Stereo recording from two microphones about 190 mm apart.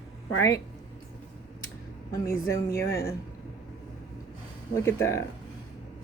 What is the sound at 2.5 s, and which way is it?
Speech, 15° left (ahead or behind).